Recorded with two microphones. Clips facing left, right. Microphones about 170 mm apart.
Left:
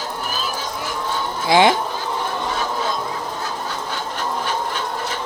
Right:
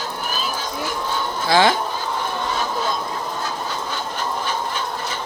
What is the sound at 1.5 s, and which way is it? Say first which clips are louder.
Speech: left 2 dB; 20° left (ahead or behind).